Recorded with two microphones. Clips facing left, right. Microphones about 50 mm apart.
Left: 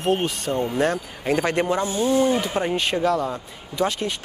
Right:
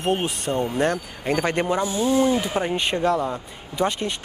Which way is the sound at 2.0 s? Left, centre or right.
Right.